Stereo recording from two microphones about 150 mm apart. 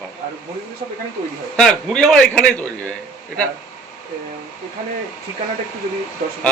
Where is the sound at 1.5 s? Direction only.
5° left (ahead or behind).